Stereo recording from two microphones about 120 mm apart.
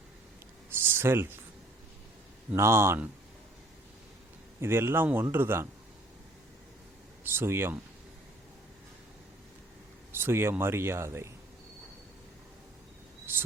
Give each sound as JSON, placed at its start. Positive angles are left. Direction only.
{"t": 0.7, "sound": "a sound", "side_deg": -20}
{"t": 2.5, "sound": "speech", "side_deg": -20}
{"t": 4.6, "sound": "speech", "side_deg": -20}
{"t": 7.3, "sound": "speech", "side_deg": -20}
{"t": 10.1, "sound": "speech", "side_deg": -20}
{"t": 13.3, "sound": "speech", "side_deg": -15}